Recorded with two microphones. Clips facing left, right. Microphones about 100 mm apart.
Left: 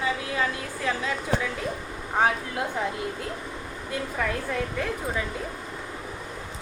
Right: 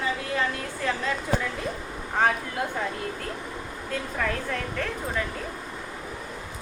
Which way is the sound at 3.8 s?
10° left (ahead or behind).